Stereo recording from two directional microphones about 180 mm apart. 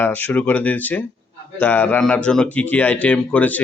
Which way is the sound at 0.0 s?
10° left (ahead or behind).